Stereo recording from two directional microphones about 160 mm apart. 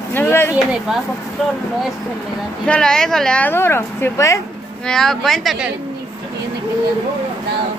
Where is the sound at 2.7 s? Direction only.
5° left (ahead or behind).